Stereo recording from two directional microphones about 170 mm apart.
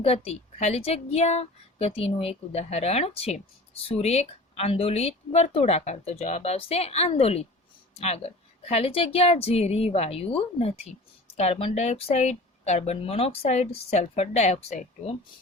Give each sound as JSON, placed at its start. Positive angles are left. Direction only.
{"t": 0.0, "sound": "a woman's voice", "side_deg": 35}